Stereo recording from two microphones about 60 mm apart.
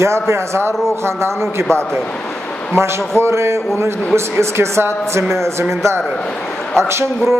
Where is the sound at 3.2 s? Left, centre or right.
Right.